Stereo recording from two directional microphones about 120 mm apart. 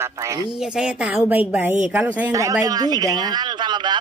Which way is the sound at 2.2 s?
30° right (ahead or behind).